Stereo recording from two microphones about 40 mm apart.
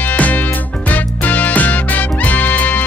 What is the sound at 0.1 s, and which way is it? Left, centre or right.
Music, left.